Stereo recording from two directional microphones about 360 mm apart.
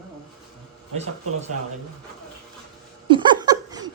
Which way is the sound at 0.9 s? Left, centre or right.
Centre.